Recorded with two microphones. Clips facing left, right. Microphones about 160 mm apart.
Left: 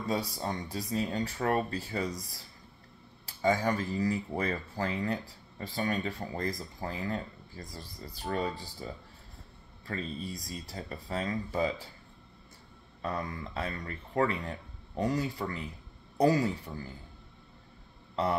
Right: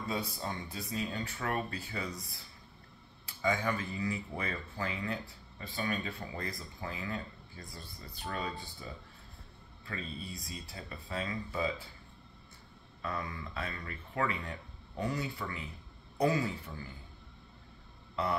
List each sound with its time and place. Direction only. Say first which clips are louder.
0.1 s speech: left 5 dB; 35° left (ahead or behind)
9.8 s speech: left 5 dB; 40° left (ahead or behind)
13.0 s speech: left 4 dB; 40° left (ahead or behind)